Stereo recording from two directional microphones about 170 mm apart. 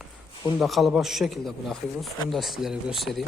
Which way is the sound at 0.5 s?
Centre (ahead or behind).